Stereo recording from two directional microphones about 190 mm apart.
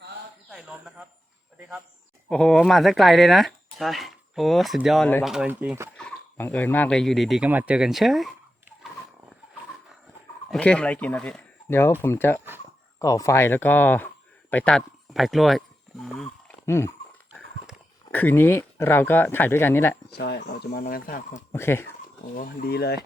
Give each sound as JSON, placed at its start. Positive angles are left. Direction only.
{"t": 0.5, "sound": "bird", "side_deg": -5}
{"t": 2.3, "sound": "speech", "side_deg": 0}
{"t": 6.0, "sound": "speech", "side_deg": 5}
{"t": 10.5, "sound": "speech", "side_deg": 5}
{"t": 16.6, "sound": "speech", "side_deg": 15}
{"t": 18.1, "sound": "speech", "side_deg": 10}
{"t": 20.1, "sound": "speech", "side_deg": 60}
{"t": 20.7, "sound": "speech", "side_deg": 50}
{"t": 21.3, "sound": "speech", "side_deg": 15}
{"t": 22.4, "sound": "speech", "side_deg": 55}